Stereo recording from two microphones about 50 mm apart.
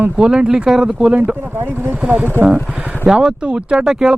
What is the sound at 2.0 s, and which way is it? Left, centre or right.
Speech, right.